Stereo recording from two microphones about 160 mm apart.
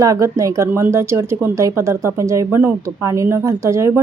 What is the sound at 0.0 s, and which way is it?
A woman's voice, 20° right (ahead or behind).